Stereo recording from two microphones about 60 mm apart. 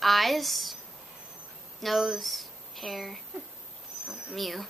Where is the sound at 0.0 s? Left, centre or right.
Centre.